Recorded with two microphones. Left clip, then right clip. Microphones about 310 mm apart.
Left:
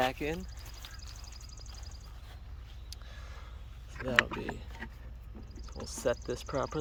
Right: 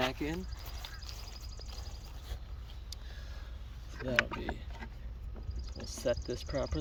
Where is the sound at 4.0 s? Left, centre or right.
Centre.